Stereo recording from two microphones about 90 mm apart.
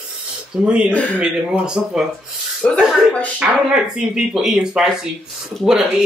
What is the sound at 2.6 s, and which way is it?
Speech, 15° left (ahead or behind).